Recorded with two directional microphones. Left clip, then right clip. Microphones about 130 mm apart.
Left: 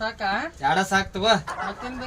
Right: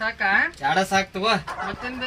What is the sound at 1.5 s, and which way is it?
Speech, centre (ahead or behind).